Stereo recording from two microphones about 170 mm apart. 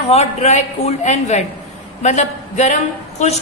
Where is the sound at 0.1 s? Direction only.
40° left (ahead or behind).